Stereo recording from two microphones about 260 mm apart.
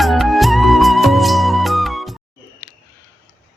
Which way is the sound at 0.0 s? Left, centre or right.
Centre.